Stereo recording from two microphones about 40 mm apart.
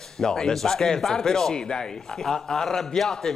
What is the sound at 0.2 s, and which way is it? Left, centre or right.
Speech, centre.